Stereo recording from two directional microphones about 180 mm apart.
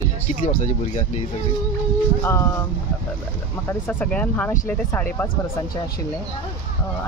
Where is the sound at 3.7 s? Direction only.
10° left (ahead or behind).